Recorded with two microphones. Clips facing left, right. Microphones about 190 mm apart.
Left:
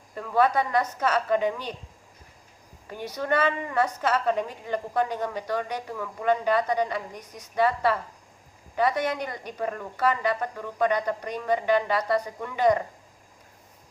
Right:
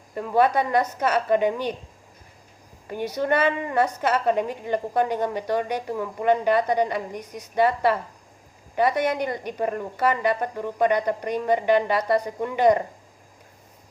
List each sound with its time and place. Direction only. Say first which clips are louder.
0.2 s speech: right 3 dB; 20° right (ahead or behind)
3.2 s a woman's voice: right 3 dB; 20° right (ahead or behind)